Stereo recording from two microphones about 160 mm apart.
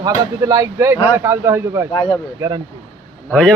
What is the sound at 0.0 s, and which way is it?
Speech, 20° right (ahead or behind).